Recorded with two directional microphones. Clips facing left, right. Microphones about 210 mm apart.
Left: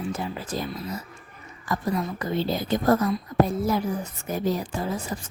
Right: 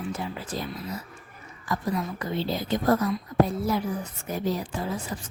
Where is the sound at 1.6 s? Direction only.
45° left (ahead or behind).